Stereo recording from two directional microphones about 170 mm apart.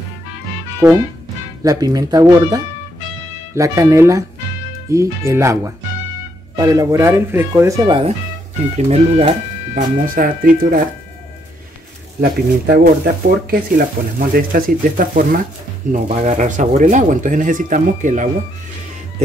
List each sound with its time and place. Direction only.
0.8 s speech: 10° right (ahead or behind)
1.6 s speech: 20° right (ahead or behind)
8.7 s speech: 40° right (ahead or behind)
9.8 s speech: 55° right (ahead or behind)
12.2 s speech: 65° right (ahead or behind); by 18.3 s 45° right (ahead or behind)